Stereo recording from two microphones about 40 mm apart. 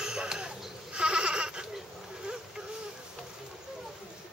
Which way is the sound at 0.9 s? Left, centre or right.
Right.